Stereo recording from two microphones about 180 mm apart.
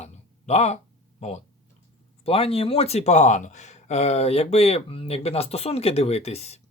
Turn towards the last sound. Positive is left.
turn(degrees=35)  # may be behind; listen again after turning